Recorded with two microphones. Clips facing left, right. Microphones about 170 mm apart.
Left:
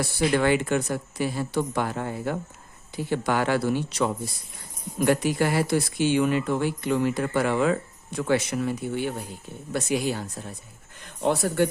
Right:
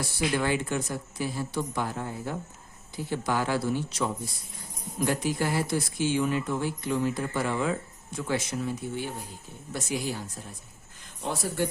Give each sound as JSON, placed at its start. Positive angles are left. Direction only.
{"t": 0.0, "sound": "speech", "side_deg": 70}